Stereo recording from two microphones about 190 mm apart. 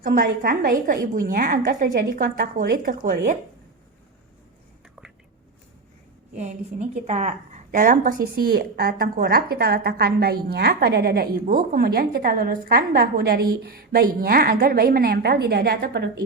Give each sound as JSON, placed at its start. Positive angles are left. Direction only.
{"t": 0.0, "sound": "a woman's voice", "side_deg": -50}
{"t": 6.3, "sound": "a woman's voice", "side_deg": -40}